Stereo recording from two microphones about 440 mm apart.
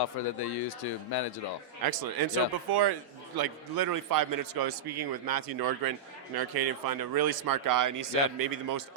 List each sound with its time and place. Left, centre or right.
0.0 s speech: left
1.8 s a man's voice: right